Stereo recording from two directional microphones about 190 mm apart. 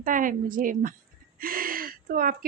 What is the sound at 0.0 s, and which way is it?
Speech, 45° right (ahead or behind).